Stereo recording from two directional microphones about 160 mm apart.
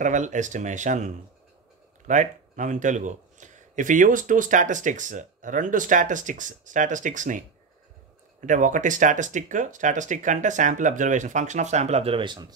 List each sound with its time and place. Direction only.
0.0 s speech: 50° right (ahead or behind); by 12.5 s 25° right (ahead or behind)